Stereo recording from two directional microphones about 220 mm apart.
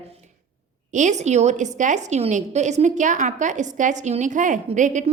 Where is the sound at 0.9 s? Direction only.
30° right (ahead or behind).